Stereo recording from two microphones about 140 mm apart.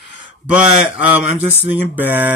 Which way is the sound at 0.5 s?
10° right (ahead or behind).